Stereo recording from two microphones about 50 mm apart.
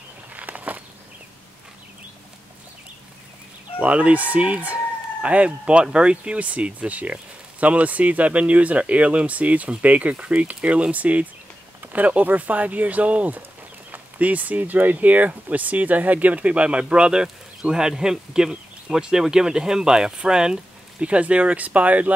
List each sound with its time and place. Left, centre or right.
0.3 s a sound: right
3.8 s speech: right
21.0 s speech: right